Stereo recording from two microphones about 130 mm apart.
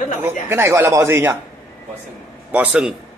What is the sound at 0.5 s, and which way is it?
Speech, 20° right (ahead or behind).